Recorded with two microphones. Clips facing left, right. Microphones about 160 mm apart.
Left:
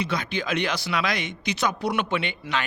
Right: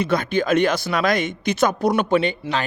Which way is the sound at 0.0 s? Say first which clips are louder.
Right 7 dB; 50° right (ahead or behind).